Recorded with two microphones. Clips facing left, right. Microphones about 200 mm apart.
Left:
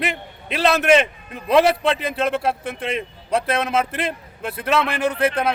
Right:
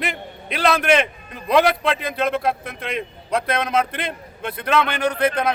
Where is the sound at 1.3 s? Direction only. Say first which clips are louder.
Left 1 dB; centre (ahead or behind).